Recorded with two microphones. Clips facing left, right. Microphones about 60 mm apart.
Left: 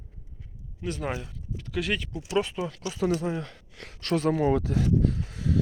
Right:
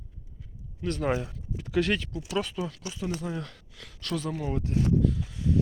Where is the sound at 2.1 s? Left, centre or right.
Left.